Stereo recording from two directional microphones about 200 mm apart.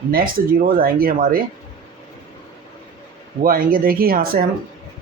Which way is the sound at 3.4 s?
45° right (ahead or behind).